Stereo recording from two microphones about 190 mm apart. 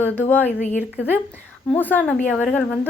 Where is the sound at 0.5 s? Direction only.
40° left (ahead or behind).